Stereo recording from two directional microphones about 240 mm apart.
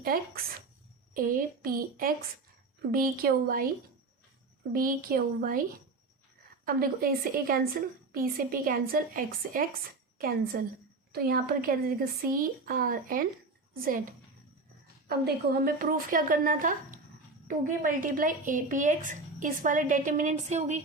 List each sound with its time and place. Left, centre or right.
0.0 s a woman's voice: right
4.7 s a woman's voice: right
6.7 s a woman's voice: right
15.0 s a woman's voice: right